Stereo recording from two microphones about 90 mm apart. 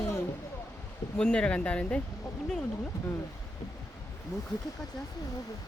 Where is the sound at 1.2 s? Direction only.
10° left (ahead or behind).